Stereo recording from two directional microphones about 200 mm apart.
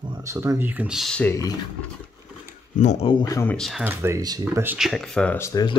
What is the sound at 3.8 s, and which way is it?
Speech, 10° right (ahead or behind).